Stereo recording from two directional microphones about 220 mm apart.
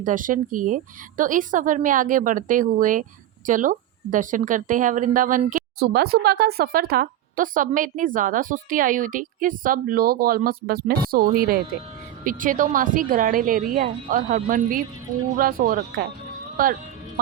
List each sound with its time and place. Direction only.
0.0 s a woman's voice: 35° right (ahead or behind)